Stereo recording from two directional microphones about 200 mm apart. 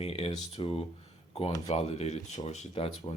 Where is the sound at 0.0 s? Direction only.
30° left (ahead or behind).